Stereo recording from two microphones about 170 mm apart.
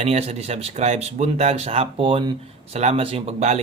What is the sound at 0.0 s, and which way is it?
Speech, 35° right (ahead or behind).